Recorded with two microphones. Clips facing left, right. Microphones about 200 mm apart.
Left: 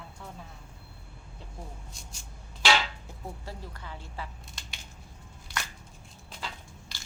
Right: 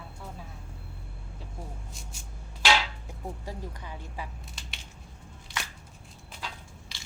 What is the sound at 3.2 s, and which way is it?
A woman's voice, 15° right (ahead or behind).